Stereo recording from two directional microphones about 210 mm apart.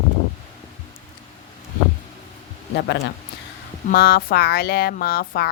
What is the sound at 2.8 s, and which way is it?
Speech, 55° left (ahead or behind).